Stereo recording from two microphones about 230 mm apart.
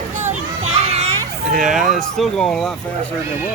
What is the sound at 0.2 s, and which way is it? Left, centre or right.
Children playing, right.